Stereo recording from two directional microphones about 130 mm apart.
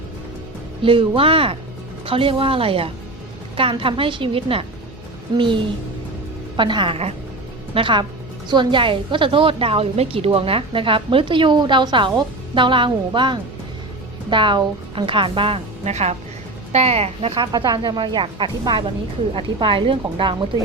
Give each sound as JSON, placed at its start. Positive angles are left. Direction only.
{"t": 0.8, "sound": "a woman's voice", "side_deg": -40}
{"t": 6.6, "sound": "a woman's voice", "side_deg": -40}